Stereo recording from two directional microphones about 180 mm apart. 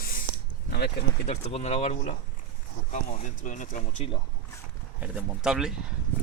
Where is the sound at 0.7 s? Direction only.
65° left (ahead or behind).